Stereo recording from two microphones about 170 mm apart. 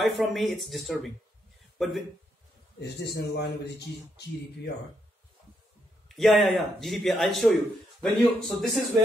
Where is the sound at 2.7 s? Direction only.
75° left (ahead or behind).